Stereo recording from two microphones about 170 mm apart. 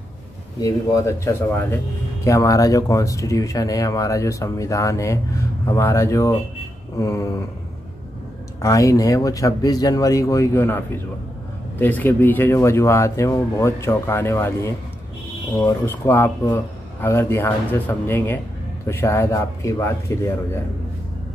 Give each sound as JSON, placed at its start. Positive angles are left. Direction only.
{"t": 0.6, "sound": "speech", "side_deg": 20}
{"t": 8.5, "sound": "speech", "side_deg": 20}